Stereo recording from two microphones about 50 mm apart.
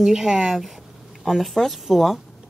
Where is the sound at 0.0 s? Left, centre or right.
Centre.